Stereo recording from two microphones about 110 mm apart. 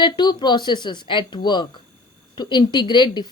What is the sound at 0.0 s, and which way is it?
A woman's voice, 40° left (ahead or behind).